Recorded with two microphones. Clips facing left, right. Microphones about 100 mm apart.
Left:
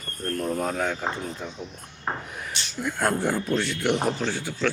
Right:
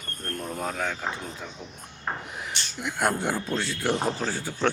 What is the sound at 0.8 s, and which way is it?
Speech, 10° left (ahead or behind).